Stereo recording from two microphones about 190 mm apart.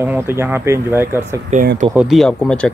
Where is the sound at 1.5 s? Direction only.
35° right (ahead or behind).